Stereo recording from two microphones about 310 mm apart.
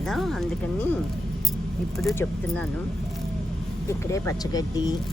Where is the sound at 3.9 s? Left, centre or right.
Centre.